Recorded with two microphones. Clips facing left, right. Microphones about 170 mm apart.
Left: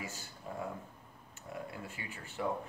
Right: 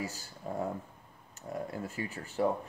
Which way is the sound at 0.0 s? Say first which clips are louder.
Right 5 dB; 40° right (ahead or behind).